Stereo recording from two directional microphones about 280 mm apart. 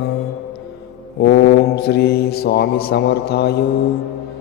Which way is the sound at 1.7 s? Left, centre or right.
Left.